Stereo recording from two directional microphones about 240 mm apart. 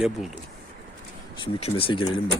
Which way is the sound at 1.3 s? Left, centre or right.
Centre.